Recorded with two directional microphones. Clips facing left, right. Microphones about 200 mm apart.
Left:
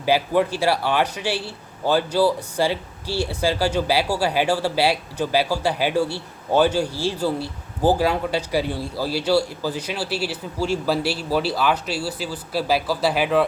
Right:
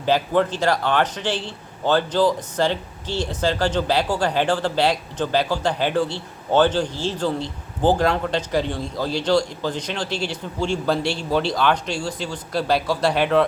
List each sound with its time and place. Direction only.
0.0 s speech: 10° left (ahead or behind)